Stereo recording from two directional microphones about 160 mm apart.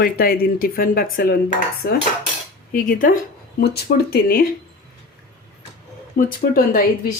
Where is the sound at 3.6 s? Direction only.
85° left.